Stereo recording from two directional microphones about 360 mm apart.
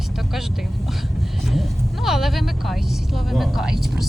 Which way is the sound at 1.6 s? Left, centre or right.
Centre.